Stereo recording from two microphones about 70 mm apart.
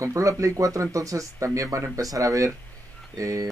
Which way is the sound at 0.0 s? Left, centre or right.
Right.